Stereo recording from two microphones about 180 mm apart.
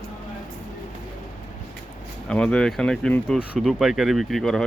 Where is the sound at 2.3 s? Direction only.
5° left (ahead or behind).